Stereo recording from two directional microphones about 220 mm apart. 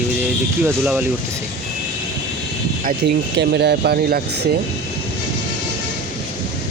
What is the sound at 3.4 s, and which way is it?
Speech, 50° right (ahead or behind).